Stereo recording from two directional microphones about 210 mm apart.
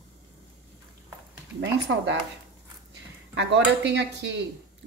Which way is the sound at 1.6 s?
60° right (ahead or behind).